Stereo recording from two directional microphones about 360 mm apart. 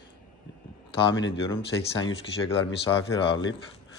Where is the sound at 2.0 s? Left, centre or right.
Centre.